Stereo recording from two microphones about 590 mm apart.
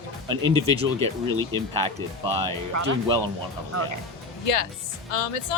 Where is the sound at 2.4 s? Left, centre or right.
Right.